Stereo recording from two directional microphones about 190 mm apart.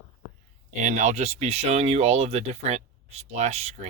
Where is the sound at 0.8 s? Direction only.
40° right (ahead or behind).